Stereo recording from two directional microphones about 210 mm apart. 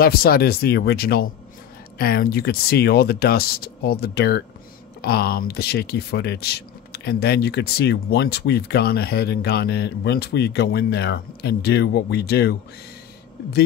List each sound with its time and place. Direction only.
0.0 s speech: 45° left (ahead or behind)